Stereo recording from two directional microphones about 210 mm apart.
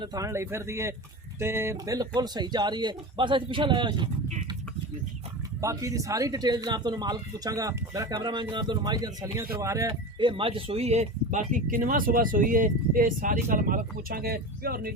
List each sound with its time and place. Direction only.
0.0 s speech: 15° right (ahead or behind)
5.5 s speech: 15° right (ahead or behind); by 14.9 s 45° right (ahead or behind)